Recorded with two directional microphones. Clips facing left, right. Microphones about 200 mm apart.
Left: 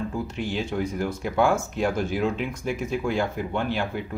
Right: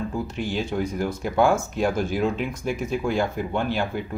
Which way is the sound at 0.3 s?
40° right (ahead or behind).